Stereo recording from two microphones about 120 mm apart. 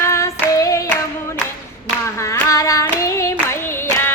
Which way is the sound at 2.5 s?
30° left (ahead or behind).